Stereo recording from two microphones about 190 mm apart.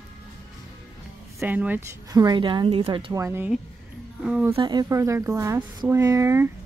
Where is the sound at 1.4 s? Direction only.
10° right (ahead or behind).